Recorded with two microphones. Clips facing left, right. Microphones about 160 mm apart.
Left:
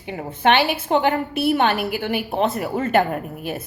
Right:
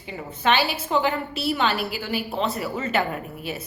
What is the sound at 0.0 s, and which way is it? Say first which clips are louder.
A woman's voice: left 5 dB; 60° left (ahead or behind).